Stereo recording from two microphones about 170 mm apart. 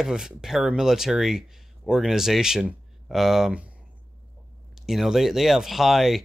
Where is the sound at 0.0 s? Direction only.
5° right (ahead or behind).